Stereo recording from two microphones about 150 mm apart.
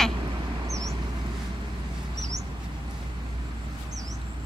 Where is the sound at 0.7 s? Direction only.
20° right (ahead or behind).